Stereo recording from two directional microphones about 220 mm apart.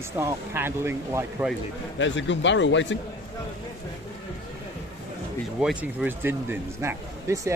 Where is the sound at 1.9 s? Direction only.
55° left (ahead or behind).